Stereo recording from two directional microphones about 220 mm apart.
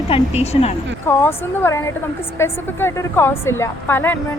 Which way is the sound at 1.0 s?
10° left (ahead or behind).